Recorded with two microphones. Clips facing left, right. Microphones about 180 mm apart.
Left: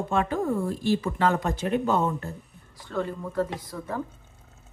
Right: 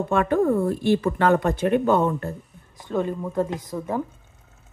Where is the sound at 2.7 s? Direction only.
20° right (ahead or behind).